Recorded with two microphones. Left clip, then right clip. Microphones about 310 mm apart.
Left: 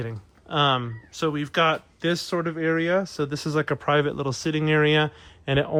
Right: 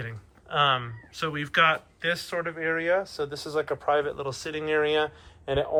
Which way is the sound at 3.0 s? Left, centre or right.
Left.